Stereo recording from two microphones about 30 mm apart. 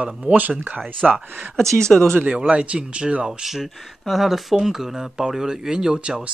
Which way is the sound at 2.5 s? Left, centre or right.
Right.